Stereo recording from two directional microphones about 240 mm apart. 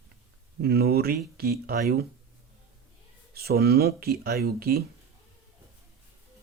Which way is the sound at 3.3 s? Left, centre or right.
Right.